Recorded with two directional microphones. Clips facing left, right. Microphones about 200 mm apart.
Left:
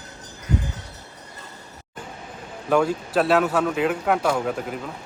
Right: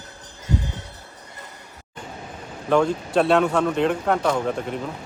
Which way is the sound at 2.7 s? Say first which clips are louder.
Right 1 dB; 5° left (ahead or behind).